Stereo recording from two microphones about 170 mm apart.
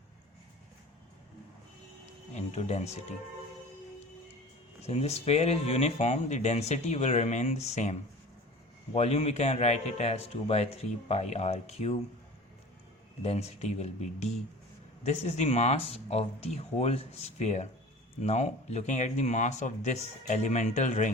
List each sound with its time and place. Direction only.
2.3 s speech: 40° left (ahead or behind)
4.8 s speech: 40° left (ahead or behind)
13.2 s speech: 40° left (ahead or behind)